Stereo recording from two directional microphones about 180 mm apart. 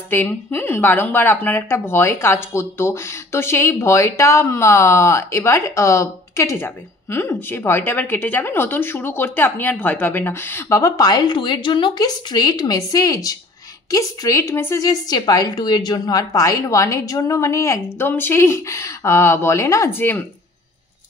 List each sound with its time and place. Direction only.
0.1 s a woman's voice: 10° left (ahead or behind)